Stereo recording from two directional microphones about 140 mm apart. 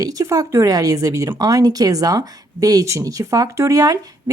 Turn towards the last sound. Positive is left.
turn(degrees=-25)  # may be behind; listen again after turning